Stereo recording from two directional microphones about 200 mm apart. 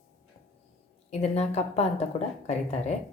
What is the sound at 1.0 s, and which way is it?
A woman's voice, 30° left (ahead or behind).